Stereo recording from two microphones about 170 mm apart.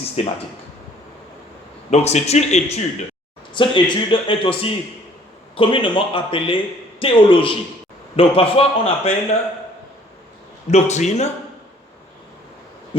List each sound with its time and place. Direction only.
0.2 s a man's voice: 35° left (ahead or behind)
1.9 s a man's voice: 40° left (ahead or behind)
3.5 s a man's voice: 30° left (ahead or behind)
10.7 s a man's voice: 40° left (ahead or behind)